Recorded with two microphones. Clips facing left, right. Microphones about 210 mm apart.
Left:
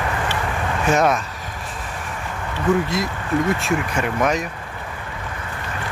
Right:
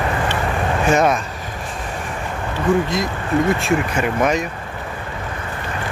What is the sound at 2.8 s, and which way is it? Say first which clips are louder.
Speech: right 2 dB; 5° left (ahead or behind).